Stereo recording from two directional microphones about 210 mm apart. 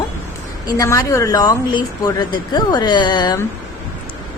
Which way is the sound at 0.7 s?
15° left (ahead or behind).